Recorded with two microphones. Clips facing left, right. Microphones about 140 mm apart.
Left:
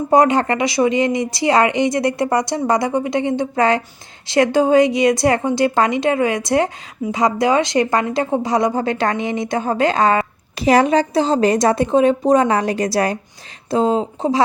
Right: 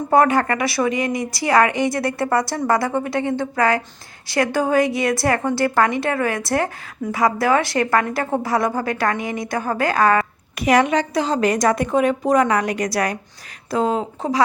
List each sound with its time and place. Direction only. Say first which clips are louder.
0.1 s a woman's voice: left 2 dB; 20° left (ahead or behind)